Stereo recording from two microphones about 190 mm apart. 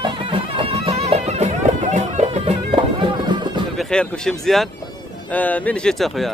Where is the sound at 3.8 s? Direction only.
5° left (ahead or behind).